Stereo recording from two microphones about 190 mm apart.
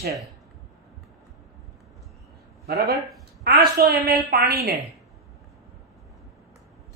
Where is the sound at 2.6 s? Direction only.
55° right (ahead or behind).